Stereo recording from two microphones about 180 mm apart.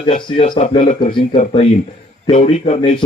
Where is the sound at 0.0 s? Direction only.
30° left (ahead or behind).